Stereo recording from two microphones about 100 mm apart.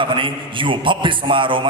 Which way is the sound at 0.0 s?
55° right (ahead or behind).